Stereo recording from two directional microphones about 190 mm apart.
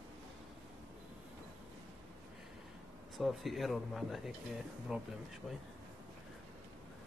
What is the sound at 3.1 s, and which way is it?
Speech, centre (ahead or behind).